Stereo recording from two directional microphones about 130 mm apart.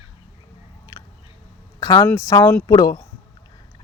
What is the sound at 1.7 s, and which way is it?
Speech, 30° left (ahead or behind).